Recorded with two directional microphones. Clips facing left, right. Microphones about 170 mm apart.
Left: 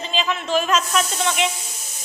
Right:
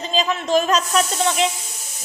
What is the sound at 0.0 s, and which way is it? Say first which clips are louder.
Speech: right 3 dB; 40° right (ahead or behind).